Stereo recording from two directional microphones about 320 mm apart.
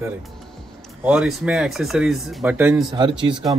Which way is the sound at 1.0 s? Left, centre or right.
Centre.